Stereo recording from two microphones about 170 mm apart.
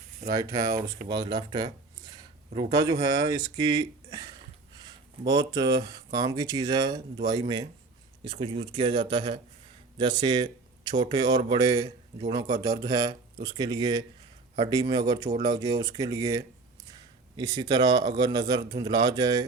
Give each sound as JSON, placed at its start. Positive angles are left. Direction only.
{"t": 0.3, "sound": "a man's voice", "side_deg": -20}